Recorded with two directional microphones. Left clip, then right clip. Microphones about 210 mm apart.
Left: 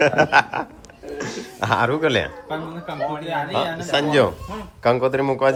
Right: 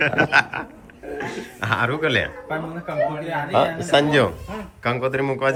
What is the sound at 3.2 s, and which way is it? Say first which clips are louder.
Speech: right 2 dB; 5° left (ahead or behind).